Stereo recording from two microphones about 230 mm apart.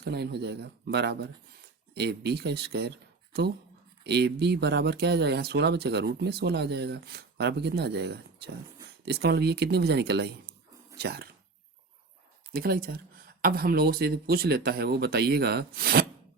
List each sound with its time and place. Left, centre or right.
0.0 s speech: right
4.0 s speech: right
12.5 s speech: right